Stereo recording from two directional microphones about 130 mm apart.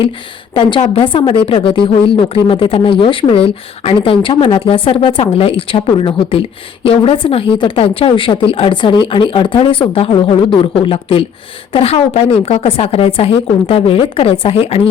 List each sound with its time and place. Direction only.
0.5 s a woman's voice: 45° left (ahead or behind)